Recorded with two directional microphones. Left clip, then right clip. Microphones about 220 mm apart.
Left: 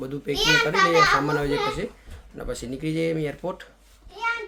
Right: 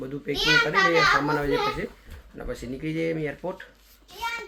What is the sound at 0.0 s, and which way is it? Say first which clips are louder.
A child's voice: left 2 dB; 10° left (ahead or behind).